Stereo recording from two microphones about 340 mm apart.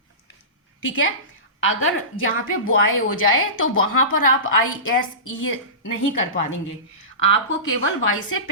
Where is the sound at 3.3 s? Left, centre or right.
Left.